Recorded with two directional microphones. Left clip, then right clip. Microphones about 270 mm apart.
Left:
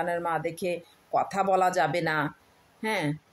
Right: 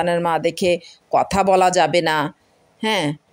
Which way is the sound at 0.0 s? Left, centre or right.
Right.